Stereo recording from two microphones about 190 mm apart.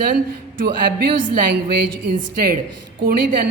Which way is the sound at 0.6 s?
55° right (ahead or behind).